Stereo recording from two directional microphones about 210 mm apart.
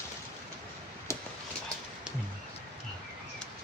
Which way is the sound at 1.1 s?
15° left (ahead or behind).